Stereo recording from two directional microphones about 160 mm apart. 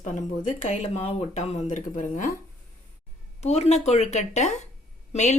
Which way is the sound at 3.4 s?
45° left (ahead or behind).